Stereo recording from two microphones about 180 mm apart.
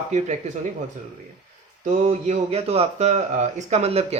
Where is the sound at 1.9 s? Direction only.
40° right (ahead or behind).